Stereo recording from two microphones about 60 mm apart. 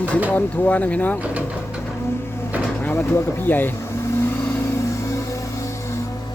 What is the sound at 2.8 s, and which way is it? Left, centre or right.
Speech, left.